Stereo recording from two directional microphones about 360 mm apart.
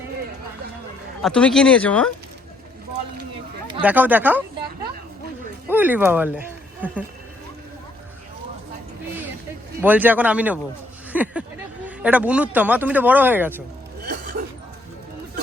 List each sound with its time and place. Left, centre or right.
1.2 s speech: centre
3.7 s speech: centre
5.6 s speech: centre
9.8 s speech: centre
14.1 s a sound: right